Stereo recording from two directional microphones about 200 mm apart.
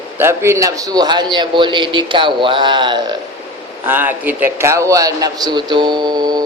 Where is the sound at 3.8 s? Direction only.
10° right (ahead or behind).